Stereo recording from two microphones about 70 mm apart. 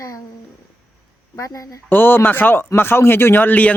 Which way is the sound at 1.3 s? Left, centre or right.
Left.